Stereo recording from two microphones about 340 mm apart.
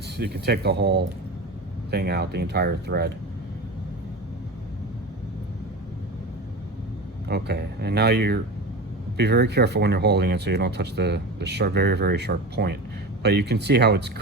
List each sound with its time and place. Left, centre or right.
0.2 s speech: right
7.3 s speech: right